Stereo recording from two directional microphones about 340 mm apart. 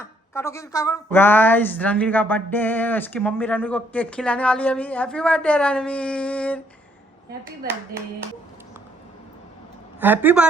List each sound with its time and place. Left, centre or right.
0.0 s speech: centre
10.0 s speech: centre